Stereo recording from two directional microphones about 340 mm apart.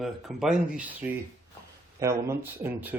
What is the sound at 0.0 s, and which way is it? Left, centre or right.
A man's voice, centre.